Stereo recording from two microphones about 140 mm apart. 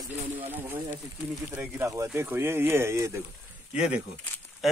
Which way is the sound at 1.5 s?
15° right (ahead or behind).